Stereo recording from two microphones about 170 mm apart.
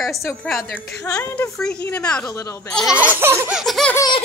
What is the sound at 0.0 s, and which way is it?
A woman's voice, centre (ahead or behind).